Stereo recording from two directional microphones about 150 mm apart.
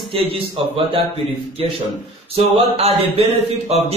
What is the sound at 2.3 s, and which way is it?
Speech, 40° right (ahead or behind).